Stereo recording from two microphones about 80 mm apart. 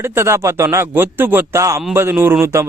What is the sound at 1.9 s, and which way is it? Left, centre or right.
Speech, right.